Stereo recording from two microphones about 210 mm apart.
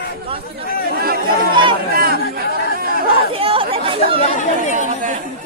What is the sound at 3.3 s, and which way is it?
Chatter, 25° right (ahead or behind).